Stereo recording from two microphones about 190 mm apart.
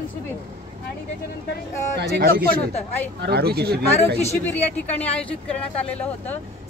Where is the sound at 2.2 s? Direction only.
50° right (ahead or behind).